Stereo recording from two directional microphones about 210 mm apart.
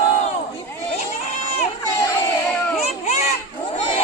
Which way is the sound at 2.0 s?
10° left (ahead or behind).